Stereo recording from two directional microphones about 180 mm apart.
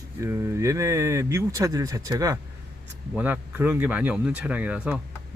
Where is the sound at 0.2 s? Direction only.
15° right (ahead or behind).